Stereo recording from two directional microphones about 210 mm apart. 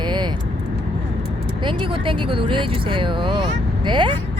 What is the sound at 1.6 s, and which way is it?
Speech, 25° right (ahead or behind).